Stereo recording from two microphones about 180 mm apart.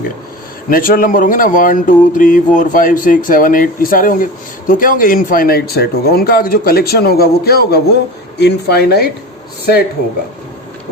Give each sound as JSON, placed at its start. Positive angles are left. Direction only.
{"t": 0.7, "sound": "speech", "side_deg": 50}